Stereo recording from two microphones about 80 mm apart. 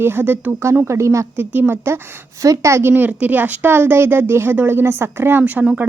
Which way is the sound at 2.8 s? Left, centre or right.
Right.